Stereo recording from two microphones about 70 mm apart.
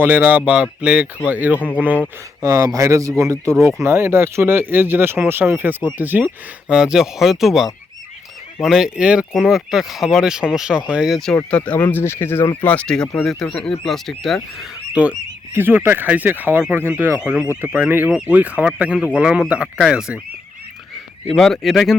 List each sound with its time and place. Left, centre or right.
0.0 s speech: right
1.5 s speech: left
2.4 s speech: right
6.7 s speech: centre
11.1 s speech: centre
11.5 s speech: centre
11.8 s speech: left
12.6 s speech: centre
15.0 s speech: right
21.3 s speech: centre